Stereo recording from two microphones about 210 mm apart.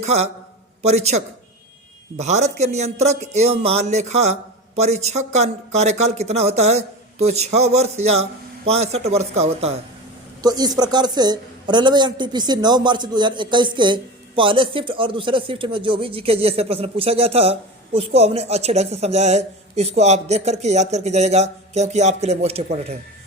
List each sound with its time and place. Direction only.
0.0 s a man's voice: 30° right (ahead or behind)
10.4 s a man's voice: 20° right (ahead or behind)